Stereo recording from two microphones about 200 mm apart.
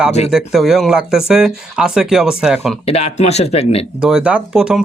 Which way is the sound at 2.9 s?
30° left (ahead or behind).